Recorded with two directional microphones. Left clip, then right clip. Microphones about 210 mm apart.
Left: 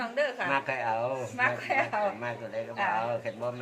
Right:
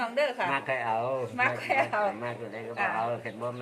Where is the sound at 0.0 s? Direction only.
45° right (ahead or behind).